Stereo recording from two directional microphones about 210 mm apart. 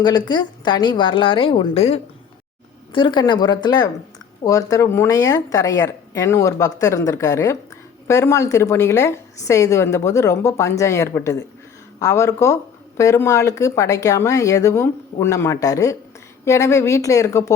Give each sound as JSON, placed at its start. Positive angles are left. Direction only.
{"t": 0.0, "sound": "a woman's voice", "side_deg": 20}